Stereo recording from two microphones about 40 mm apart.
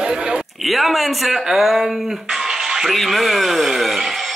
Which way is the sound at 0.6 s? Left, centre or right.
Centre.